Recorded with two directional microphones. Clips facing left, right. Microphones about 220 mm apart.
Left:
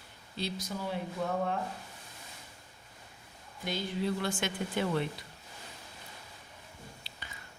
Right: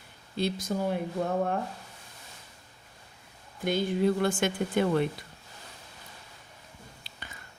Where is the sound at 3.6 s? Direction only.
50° right (ahead or behind).